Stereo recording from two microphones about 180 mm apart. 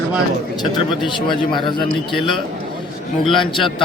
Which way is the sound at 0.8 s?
25° left (ahead or behind).